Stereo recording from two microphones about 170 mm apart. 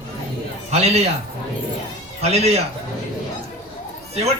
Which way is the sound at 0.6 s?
40° right (ahead or behind).